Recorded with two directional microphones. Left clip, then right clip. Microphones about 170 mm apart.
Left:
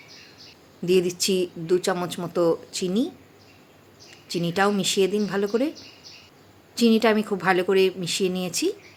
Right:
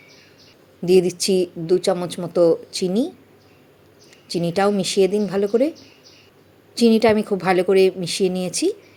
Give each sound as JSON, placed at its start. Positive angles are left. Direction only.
{"t": 0.9, "sound": "speech", "side_deg": -15}
{"t": 4.3, "sound": "speech", "side_deg": -15}
{"t": 6.7, "sound": "speech", "side_deg": -15}